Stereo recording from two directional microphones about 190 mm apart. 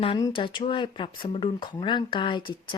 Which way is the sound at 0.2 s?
20° left (ahead or behind).